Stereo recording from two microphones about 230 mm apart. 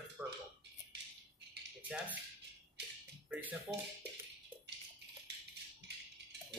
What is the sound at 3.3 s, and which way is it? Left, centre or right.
Speech, centre.